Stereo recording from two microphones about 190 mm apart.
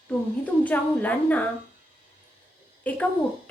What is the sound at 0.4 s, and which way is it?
A woman's voice, 10° left (ahead or behind).